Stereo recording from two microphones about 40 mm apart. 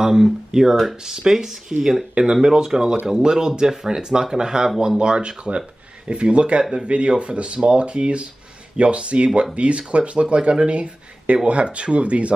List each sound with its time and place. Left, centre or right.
0.0 s speech: centre; by 12.4 s right